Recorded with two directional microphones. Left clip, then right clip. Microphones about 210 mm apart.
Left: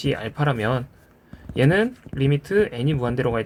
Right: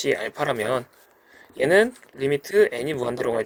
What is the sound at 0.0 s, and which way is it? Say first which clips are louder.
Speech: right 1 dB; 40° right (ahead or behind).